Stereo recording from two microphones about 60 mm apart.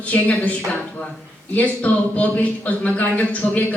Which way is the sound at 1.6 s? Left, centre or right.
Left.